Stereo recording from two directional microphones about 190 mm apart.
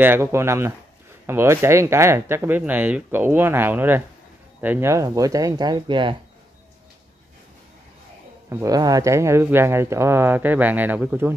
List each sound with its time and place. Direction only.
0.0 s speech: 10° right (ahead or behind)
8.5 s speech: 15° right (ahead or behind)